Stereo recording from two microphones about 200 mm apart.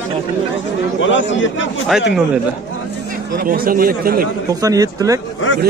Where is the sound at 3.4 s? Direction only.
45° right (ahead or behind).